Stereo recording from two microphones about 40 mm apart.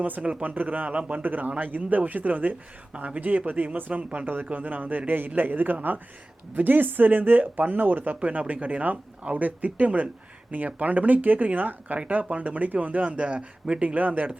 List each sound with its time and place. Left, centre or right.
0.2 s speech: right
0.4 s speech: right
1.2 s speech: right
8.8 s speech: right